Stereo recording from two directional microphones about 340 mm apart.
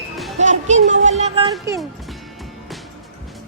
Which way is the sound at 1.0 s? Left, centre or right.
Centre.